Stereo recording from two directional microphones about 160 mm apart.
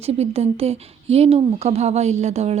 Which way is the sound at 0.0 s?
40° right (ahead or behind).